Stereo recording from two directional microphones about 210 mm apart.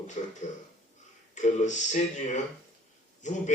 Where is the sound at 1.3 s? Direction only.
35° left (ahead or behind).